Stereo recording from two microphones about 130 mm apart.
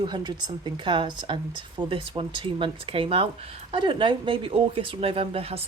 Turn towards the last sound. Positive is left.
turn(degrees=-50)  # may be behind; listen again after turning